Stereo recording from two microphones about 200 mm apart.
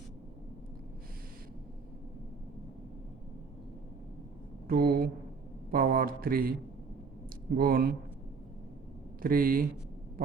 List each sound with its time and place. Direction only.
4.7 s a man's voice: 50° right (ahead or behind)
5.7 s a sound: 45° right (ahead or behind)
7.5 s speech: 50° right (ahead or behind)
9.2 s speech: 45° right (ahead or behind)